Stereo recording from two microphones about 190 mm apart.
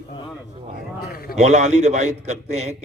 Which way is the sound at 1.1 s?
50° left (ahead or behind).